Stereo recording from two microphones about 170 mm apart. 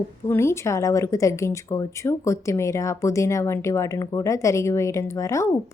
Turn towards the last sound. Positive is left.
turn(degrees=20)  # may be behind; listen again after turning